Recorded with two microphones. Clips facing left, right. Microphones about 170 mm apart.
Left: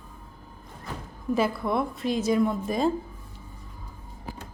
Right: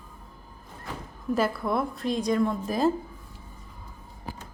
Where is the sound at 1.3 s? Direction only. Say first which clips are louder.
Left 1 dB; centre (ahead or behind).